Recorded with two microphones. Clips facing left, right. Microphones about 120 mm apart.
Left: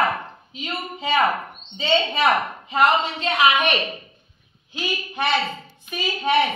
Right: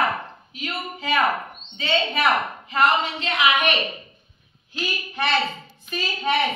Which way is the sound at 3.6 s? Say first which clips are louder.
Left 1 dB; centre (ahead or behind).